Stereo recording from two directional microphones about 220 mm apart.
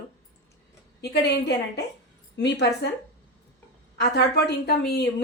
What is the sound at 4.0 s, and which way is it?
Speech, 50° left (ahead or behind).